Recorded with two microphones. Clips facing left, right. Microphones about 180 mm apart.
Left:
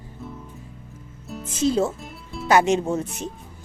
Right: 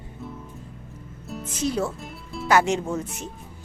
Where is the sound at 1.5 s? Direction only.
25° left (ahead or behind).